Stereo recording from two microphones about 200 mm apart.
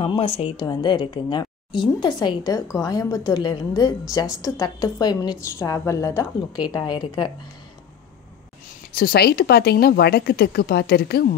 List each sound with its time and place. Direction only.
0.0 s a woman's voice: 25° left (ahead or behind)
8.9 s speech: 50° left (ahead or behind)